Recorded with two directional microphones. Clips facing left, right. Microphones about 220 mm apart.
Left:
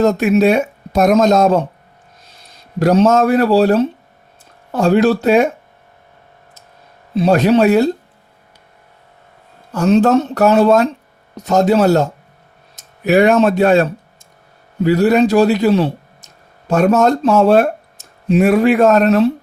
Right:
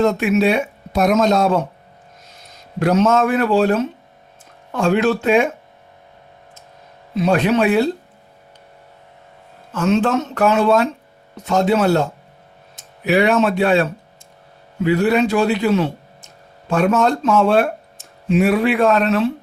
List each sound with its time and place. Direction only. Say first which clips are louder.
0.0 s speech: left 4 dB; 40° left (ahead or behind)
2.7 s speech: left 4 dB; 35° left (ahead or behind)
7.1 s speech: left 4 dB; 35° left (ahead or behind)
9.7 s speech: left 5 dB; 40° left (ahead or behind)
14.8 s speech: left 4 dB; 40° left (ahead or behind)